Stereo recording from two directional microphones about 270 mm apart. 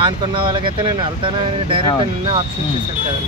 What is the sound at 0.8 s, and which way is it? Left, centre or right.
Speech, centre.